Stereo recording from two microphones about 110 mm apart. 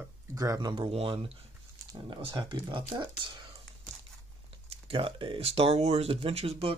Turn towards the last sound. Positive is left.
turn(degrees=-60)  # may be behind; listen again after turning